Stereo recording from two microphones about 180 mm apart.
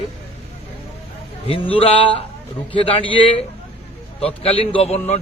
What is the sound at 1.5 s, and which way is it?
A man's voice, 30° left (ahead or behind).